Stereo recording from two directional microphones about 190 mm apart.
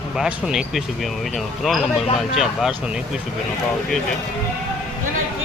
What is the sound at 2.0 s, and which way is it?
Speech, 30° left (ahead or behind).